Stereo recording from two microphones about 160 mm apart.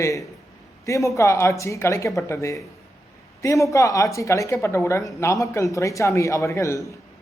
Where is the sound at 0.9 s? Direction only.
20° left (ahead or behind).